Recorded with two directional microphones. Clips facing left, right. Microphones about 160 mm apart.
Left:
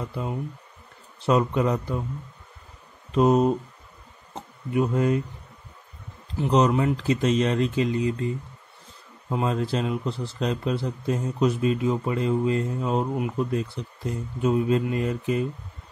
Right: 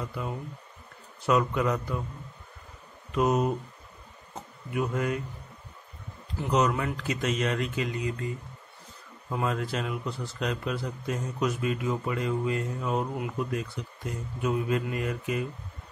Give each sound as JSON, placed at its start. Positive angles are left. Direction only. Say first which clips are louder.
{"t": 0.1, "sound": "a man's voice", "louder": "left 4 dB", "side_deg": 25}
{"t": 3.1, "sound": "a man's voice", "louder": "left 6 dB", "side_deg": 30}
{"t": 6.5, "sound": "speech", "louder": "left 5 dB", "side_deg": 25}
{"t": 9.3, "sound": "a man's voice", "louder": "left 4 dB", "side_deg": 25}